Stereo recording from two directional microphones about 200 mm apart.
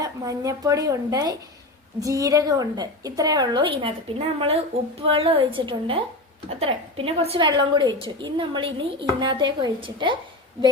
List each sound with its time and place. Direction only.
0.0 s a woman's voice: 15° right (ahead or behind)